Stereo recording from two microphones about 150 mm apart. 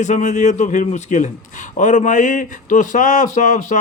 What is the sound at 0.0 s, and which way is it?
A man's voice, 55° left (ahead or behind).